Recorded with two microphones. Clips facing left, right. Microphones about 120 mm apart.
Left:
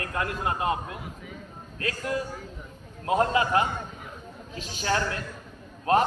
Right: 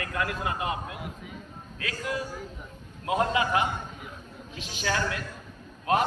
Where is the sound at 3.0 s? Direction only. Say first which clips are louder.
Left 2 dB; 35° left (ahead or behind).